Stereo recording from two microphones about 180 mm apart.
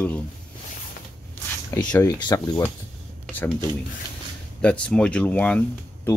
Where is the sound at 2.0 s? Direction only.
20° left (ahead or behind).